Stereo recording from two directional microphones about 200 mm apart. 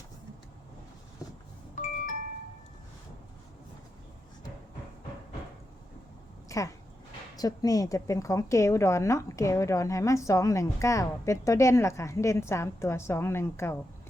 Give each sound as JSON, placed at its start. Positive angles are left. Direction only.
{"t": 1.7, "sound": "music", "side_deg": 40}
{"t": 6.5, "sound": "a woman's voice", "side_deg": 15}